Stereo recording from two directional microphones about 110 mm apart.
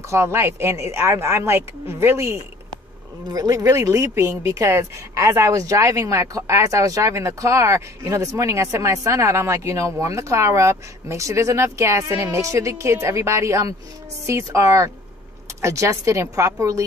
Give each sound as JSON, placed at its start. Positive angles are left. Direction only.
{"t": 0.1, "sound": "speech", "side_deg": -25}